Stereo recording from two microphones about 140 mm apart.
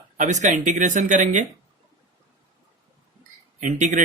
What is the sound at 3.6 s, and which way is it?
Speech, 60° right (ahead or behind).